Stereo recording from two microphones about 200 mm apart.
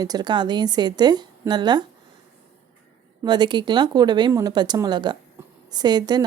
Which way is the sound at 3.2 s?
20° right (ahead or behind).